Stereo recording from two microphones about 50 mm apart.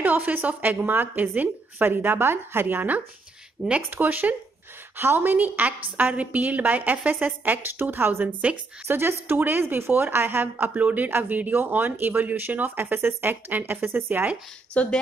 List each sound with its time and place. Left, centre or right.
0.0 s a woman's voice: right
3.6 s speech: centre
3.9 s a woman's voice: right
4.9 s a woman's voice: right
8.8 s a woman's voice: right
11.1 s a woman's voice: right
14.8 s speech: left